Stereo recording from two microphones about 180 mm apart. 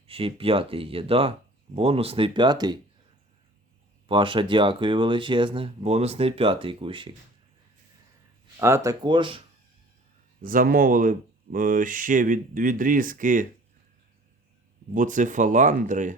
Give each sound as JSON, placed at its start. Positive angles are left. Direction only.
{"t": 0.1, "sound": "speech", "side_deg": -30}
{"t": 4.1, "sound": "speech", "side_deg": -30}
{"t": 8.5, "sound": "speech", "side_deg": -15}
{"t": 10.4, "sound": "speech", "side_deg": -50}
{"t": 14.9, "sound": "speech", "side_deg": -45}